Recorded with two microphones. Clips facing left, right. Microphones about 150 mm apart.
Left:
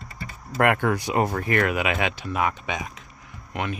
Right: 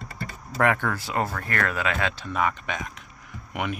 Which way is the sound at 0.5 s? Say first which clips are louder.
Left 3 dB; 10° left (ahead or behind).